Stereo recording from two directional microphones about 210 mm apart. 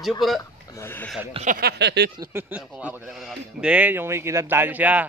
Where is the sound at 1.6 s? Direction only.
50° right (ahead or behind).